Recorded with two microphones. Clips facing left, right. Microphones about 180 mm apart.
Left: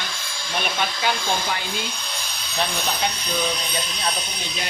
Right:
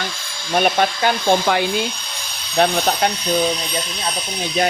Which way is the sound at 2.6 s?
60° right (ahead or behind).